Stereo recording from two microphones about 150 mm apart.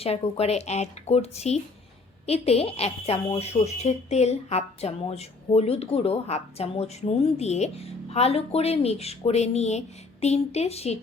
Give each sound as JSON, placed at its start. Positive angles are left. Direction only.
{"t": 0.0, "sound": "speech", "side_deg": 40}